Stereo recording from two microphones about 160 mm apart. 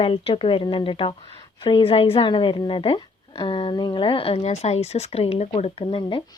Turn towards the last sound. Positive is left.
turn(degrees=35)  # may be behind; listen again after turning